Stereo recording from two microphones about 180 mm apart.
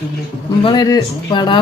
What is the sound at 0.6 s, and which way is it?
Speech, 20° left (ahead or behind).